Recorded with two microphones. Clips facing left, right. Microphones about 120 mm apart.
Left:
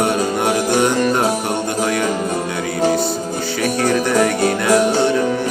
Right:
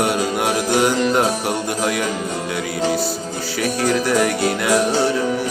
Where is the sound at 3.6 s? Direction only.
Centre (ahead or behind).